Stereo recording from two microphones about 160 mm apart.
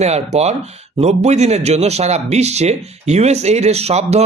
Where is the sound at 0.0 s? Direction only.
45° right (ahead or behind).